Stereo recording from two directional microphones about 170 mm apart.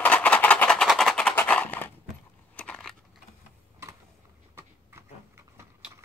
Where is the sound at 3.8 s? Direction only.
15° right (ahead or behind).